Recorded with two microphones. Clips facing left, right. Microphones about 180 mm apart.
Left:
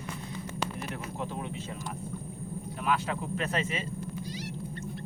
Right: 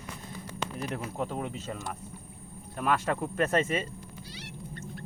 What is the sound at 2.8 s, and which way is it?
Speech, 50° right (ahead or behind).